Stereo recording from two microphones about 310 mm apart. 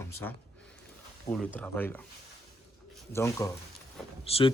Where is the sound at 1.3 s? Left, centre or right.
Centre.